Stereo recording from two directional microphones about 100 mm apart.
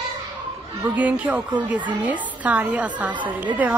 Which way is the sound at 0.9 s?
15° right (ahead or behind).